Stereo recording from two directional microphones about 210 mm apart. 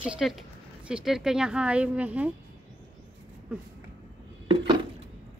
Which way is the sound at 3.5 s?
5° right (ahead or behind).